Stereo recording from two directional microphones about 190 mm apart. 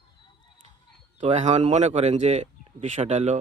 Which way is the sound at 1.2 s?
35° right (ahead or behind).